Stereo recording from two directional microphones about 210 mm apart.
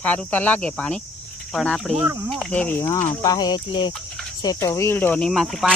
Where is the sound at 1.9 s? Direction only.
15° right (ahead or behind).